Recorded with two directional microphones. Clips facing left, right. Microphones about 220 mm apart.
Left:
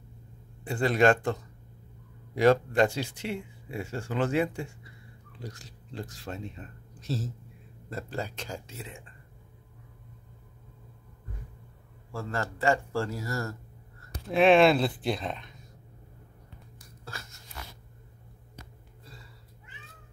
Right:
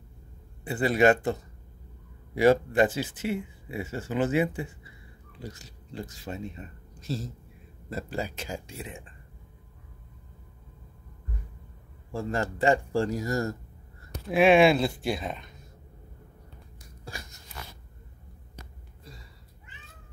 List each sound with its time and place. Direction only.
0.7 s speech: 5° right (ahead or behind)
12.1 s speech: 15° right (ahead or behind)
14.3 s speech: 5° right (ahead or behind)
17.0 s biting: 15° right (ahead or behind)